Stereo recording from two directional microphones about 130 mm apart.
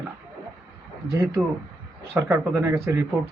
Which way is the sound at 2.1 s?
20° right (ahead or behind).